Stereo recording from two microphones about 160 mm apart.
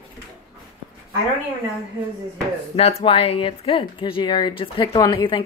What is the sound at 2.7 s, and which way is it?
Speech, 35° left (ahead or behind).